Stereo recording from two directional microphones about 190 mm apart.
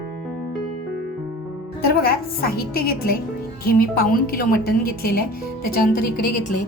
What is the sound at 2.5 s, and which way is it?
A woman's voice, 55° left (ahead or behind).